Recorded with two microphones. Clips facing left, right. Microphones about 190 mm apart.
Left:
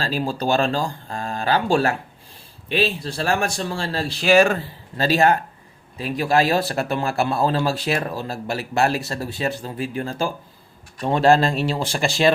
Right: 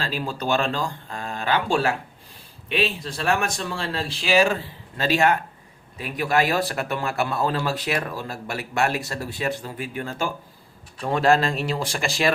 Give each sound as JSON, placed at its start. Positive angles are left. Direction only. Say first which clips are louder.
{"t": 0.0, "sound": "speech", "louder": "left 4 dB", "side_deg": 35}
{"t": 4.9, "sound": "a man's voice", "louder": "left 3 dB", "side_deg": 35}